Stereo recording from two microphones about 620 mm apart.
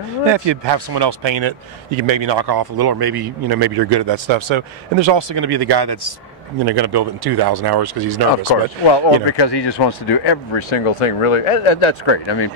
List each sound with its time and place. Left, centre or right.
0.3 s speech: right
8.8 s speech: left